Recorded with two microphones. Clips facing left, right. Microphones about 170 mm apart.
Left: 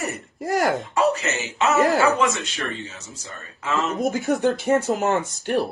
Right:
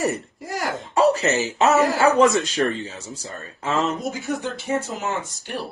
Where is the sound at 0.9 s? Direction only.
35° right (ahead or behind).